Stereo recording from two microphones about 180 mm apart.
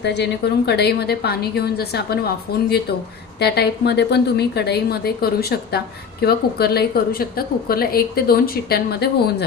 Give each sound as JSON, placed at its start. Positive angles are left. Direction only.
{"t": 0.0, "sound": "a woman's voice", "side_deg": 70}